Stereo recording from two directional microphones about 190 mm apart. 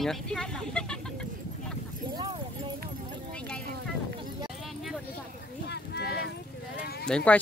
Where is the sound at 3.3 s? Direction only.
5° left (ahead or behind).